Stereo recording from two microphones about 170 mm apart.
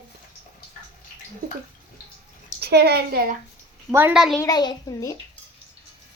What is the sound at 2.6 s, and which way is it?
Speech, 70° right (ahead or behind).